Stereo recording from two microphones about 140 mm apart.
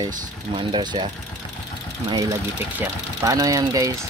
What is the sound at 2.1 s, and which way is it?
Speech, 25° right (ahead or behind).